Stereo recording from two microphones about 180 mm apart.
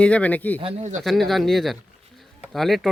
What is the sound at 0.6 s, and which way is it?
Speech, 40° right (ahead or behind).